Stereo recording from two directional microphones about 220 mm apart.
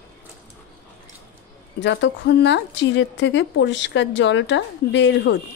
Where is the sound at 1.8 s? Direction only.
55° left (ahead or behind).